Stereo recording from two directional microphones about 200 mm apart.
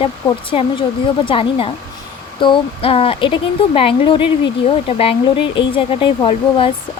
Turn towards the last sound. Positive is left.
turn(degrees=25)  # may be behind; listen again after turning